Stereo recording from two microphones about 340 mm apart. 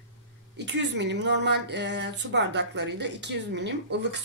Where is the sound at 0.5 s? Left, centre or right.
Right.